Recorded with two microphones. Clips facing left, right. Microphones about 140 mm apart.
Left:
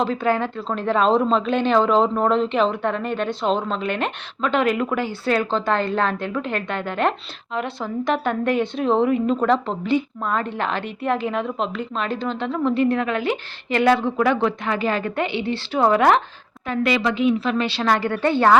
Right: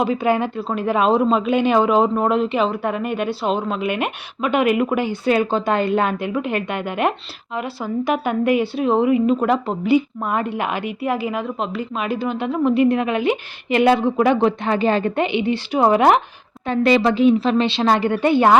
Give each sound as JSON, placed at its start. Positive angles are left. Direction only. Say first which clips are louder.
{"t": 0.0, "sound": "a woman's voice", "louder": "right 2 dB", "side_deg": -15}
{"t": 16.6, "sound": "a woman's voice", "louder": "right 5 dB", "side_deg": -30}